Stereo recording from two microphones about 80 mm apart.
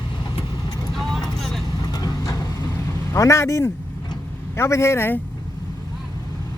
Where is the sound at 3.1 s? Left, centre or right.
Left.